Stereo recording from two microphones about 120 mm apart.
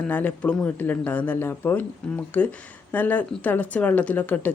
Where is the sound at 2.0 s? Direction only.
5° left (ahead or behind).